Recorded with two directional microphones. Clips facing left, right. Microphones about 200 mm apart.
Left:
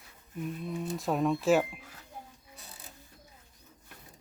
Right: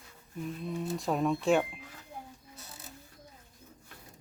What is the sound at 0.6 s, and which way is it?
Speech, centre (ahead or behind).